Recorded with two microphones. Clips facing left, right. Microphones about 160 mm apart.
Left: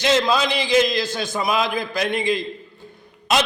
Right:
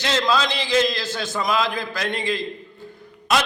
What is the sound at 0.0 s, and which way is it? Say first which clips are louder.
A man's voice: left 3 dB; 15° left (ahead or behind).